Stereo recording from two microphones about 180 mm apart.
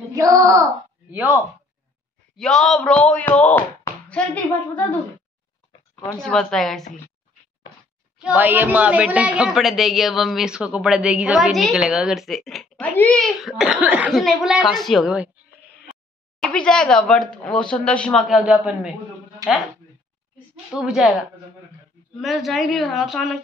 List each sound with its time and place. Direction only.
0.1 s a child's voice: 20° right (ahead or behind)
2.3 s speech: 5° left (ahead or behind)
6.2 s speech: centre (ahead or behind)
8.2 s speech: 10° right (ahead or behind)
19.4 s speech: 20° right (ahead or behind)
20.7 s speech: 5° right (ahead or behind)
22.2 s speech: centre (ahead or behind)